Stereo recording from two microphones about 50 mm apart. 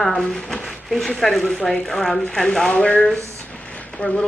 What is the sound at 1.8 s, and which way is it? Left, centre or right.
Speech, centre.